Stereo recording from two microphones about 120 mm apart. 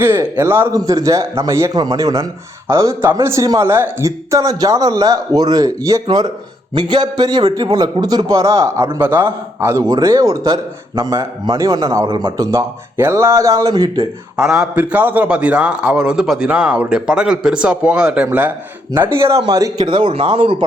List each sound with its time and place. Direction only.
0.0 s a man's voice: 20° right (ahead or behind); by 12.5 s 40° right (ahead or behind)
12.5 s speech: 25° right (ahead or behind)
14.3 s a man's voice: 5° right (ahead or behind)
19.5 s a man's voice: 30° right (ahead or behind)